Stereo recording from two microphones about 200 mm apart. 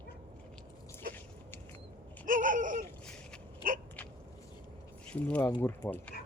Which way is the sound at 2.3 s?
40° right (ahead or behind).